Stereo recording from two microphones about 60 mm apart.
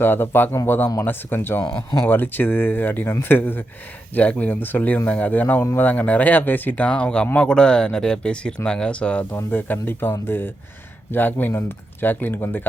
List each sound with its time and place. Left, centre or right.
0.0 s speech: left; by 9.2 s centre
9.3 s speech: left